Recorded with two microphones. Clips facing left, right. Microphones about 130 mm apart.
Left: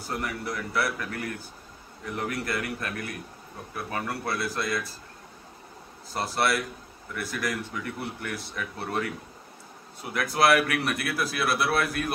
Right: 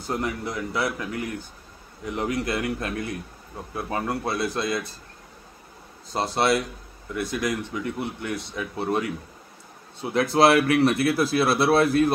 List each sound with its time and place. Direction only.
0.0 s speech: 20° right (ahead or behind)
6.1 s speech: 25° right (ahead or behind)